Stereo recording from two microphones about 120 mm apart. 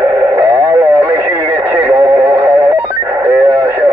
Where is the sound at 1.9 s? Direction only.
15° right (ahead or behind).